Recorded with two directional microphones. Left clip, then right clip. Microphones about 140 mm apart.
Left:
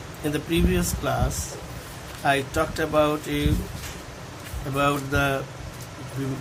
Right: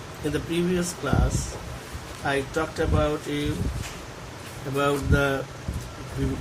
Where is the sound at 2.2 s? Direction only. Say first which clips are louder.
Left 3 dB; 50° left (ahead or behind).